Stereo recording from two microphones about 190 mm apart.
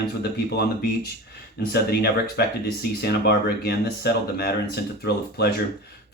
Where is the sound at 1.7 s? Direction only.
55° left (ahead or behind).